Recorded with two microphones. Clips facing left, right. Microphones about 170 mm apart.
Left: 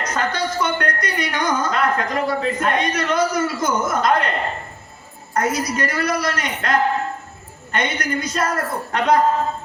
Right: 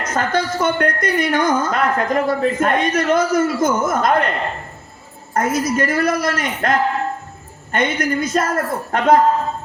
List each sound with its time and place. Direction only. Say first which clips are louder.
0.0 s a woman's voice: right 3 dB; 50° right (ahead or behind)
5.3 s a woman's voice: right 3 dB; 50° right (ahead or behind)